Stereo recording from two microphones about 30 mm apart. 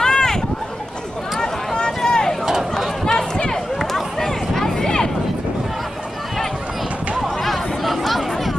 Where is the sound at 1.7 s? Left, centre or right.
Left.